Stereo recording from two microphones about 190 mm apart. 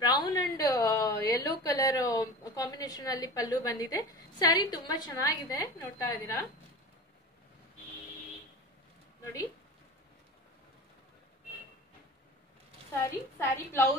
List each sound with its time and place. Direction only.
0.0 s a woman's voice: 20° left (ahead or behind)
9.2 s speech: 15° left (ahead or behind)
13.0 s a woman's voice: 15° left (ahead or behind)